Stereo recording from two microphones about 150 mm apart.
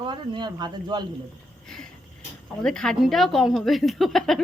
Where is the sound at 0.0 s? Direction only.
30° right (ahead or behind).